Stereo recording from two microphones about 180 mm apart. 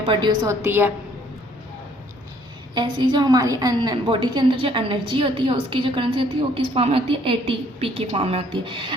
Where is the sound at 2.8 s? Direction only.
25° right (ahead or behind).